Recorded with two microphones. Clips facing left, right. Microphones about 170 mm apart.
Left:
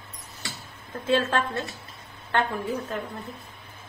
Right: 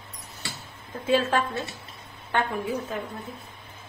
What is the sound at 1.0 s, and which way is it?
A woman's voice, 10° right (ahead or behind).